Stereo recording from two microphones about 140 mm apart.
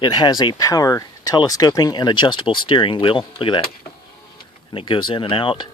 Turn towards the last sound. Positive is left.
turn(degrees=35)  # may be behind; listen again after turning